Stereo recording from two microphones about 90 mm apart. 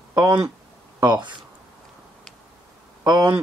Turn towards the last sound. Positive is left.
turn(degrees=-50)  # may be behind; listen again after turning